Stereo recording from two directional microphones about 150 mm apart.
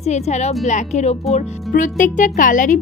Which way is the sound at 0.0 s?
50° left (ahead or behind).